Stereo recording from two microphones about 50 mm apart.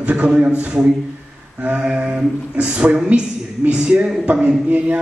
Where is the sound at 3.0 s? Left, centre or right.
Right.